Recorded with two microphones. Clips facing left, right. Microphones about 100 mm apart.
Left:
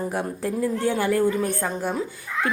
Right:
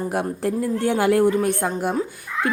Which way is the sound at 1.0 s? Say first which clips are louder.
Right 6 dB; 85° right.